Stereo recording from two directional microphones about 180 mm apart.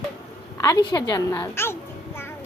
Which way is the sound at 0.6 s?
20° left (ahead or behind).